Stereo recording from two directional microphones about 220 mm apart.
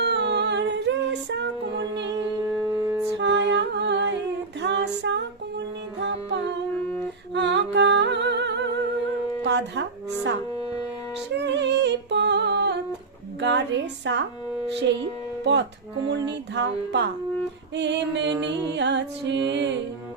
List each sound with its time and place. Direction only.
0.0 s humming: 55° right (ahead or behind)
2.1 s music: 15° right (ahead or behind)
3.2 s music: 55° right (ahead or behind)
9.4 s a sound: 55° right (ahead or behind)
11.4 s music: 55° right (ahead or behind)
13.4 s a sound: 55° right (ahead or behind)
14.7 s speech: 50° right (ahead or behind)
16.0 s music: 50° right (ahead or behind)